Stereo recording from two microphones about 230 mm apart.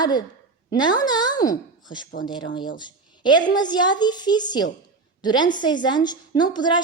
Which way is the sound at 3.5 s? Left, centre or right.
Centre.